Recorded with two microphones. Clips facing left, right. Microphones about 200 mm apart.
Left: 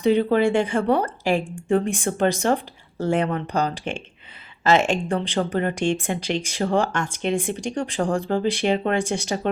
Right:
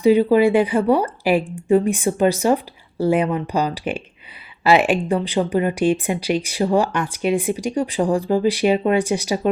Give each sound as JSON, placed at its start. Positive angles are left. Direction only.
{"t": 0.0, "sound": "speech", "side_deg": -5}
{"t": 8.0, "sound": "speech", "side_deg": -35}
{"t": 8.3, "sound": "speech", "side_deg": -10}